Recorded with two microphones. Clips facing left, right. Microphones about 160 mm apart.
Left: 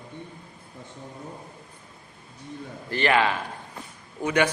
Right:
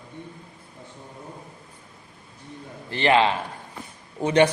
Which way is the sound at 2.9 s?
25° right (ahead or behind).